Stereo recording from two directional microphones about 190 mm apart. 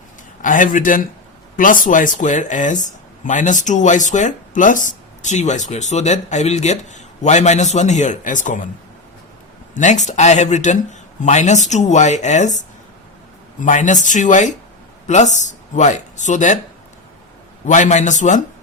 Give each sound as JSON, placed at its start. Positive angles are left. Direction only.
{"t": 0.4, "sound": "a man's voice", "side_deg": 45}
{"t": 9.7, "sound": "speech", "side_deg": 40}
{"t": 17.7, "sound": "speech", "side_deg": 40}